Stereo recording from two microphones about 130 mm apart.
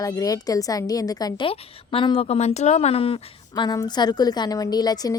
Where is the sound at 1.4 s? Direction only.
40° left (ahead or behind).